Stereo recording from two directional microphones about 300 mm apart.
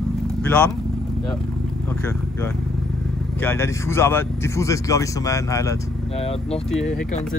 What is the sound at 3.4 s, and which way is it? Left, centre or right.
Speech, centre.